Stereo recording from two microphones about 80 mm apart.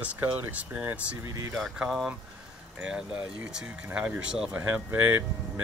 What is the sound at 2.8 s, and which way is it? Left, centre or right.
Speech, centre.